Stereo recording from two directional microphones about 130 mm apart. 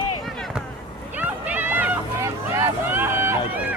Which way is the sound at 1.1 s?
15° right (ahead or behind).